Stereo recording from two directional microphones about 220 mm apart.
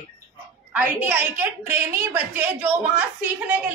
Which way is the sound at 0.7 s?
5° right (ahead or behind).